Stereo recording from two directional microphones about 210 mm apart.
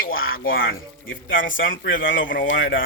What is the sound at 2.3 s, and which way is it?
Speech, 40° left (ahead or behind).